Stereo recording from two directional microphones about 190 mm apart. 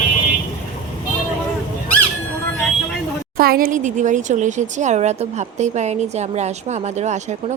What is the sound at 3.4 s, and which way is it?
Speech, 50° right (ahead or behind).